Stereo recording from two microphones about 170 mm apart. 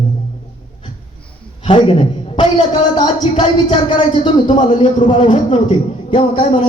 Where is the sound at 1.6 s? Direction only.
30° left (ahead or behind).